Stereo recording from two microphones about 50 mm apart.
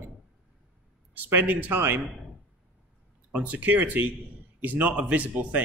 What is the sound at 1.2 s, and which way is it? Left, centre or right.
Speech, right.